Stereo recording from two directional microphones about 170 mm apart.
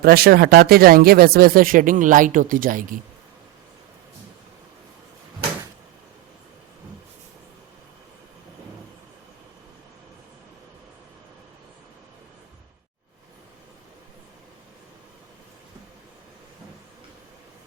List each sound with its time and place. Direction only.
0.0 s speech: 65° right (ahead or behind)